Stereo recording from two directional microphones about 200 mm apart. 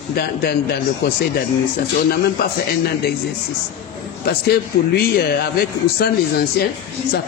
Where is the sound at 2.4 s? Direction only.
55° left (ahead or behind).